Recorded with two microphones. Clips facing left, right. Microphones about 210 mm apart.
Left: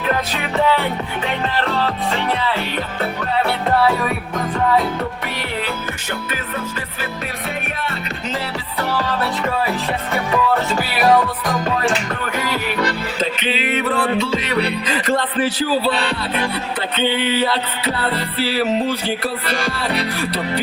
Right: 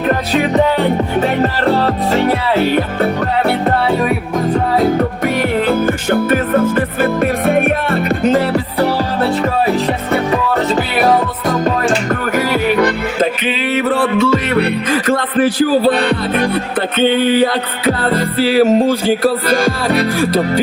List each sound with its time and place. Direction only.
0.7 s music: 45° right (ahead or behind)
4.8 s music: 45° right (ahead or behind)
12.8 s music: 55° right (ahead or behind)
17.1 s music: 50° right (ahead or behind)